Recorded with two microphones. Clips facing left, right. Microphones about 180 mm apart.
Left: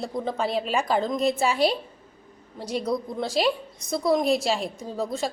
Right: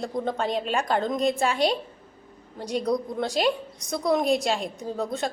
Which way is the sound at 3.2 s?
Centre (ahead or behind).